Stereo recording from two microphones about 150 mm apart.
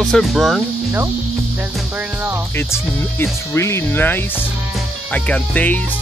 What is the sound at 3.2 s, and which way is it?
Speech, 20° left (ahead or behind).